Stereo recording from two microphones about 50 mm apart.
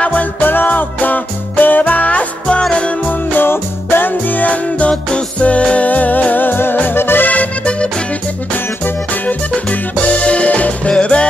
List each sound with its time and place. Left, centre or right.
0.0 s music: left
7.2 s music: left